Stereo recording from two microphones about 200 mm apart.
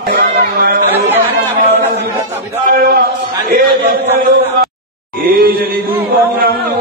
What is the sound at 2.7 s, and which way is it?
A man's voice, 50° right (ahead or behind).